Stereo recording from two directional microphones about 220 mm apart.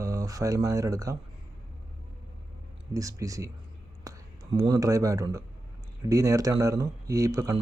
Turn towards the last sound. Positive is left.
turn(degrees=-15)  # may be behind; listen again after turning